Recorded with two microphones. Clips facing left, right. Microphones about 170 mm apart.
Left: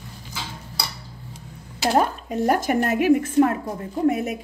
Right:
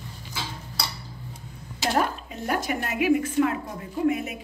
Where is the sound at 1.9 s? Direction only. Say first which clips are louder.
Left 5 dB; 40° left (ahead or behind).